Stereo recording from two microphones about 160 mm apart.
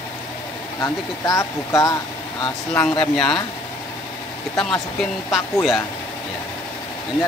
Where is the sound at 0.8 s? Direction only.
20° left (ahead or behind).